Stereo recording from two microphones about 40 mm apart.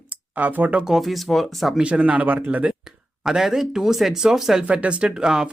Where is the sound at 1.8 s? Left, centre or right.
Right.